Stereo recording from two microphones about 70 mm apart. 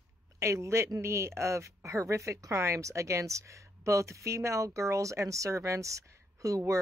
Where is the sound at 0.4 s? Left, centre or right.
Right.